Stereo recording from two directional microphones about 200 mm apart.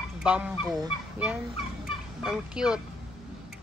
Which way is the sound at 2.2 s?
5° right (ahead or behind).